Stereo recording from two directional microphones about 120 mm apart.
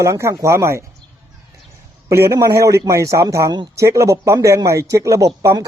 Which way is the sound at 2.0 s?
25° right (ahead or behind).